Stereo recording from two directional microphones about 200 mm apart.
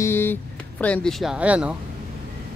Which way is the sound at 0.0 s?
10° left (ahead or behind).